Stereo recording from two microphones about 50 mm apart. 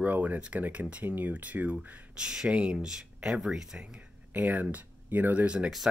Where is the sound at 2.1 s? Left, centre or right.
Centre.